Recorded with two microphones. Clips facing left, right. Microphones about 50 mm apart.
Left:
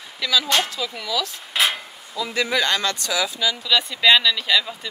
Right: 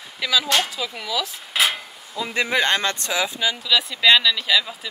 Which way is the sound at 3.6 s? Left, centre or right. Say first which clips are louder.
Even; centre.